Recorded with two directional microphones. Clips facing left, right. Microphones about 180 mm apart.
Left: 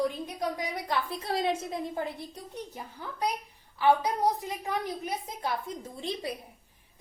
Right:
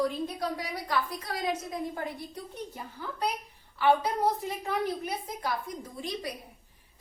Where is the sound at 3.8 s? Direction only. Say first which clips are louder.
Even; 15° left (ahead or behind).